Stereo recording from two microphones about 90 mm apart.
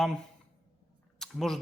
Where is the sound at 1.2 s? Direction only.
5° left (ahead or behind).